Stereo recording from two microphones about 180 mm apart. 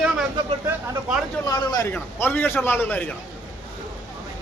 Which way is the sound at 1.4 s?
20° left (ahead or behind).